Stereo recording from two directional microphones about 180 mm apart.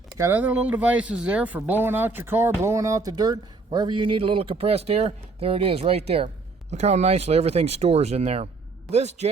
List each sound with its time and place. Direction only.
0.1 s a man's voice: 15° right (ahead or behind); by 9.3 s 35° right (ahead or behind)